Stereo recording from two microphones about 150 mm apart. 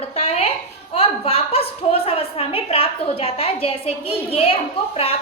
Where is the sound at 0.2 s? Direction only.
40° left (ahead or behind).